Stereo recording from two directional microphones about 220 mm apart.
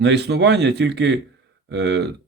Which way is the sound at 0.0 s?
50° right (ahead or behind).